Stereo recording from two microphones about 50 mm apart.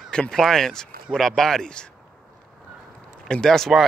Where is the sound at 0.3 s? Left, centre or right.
Centre.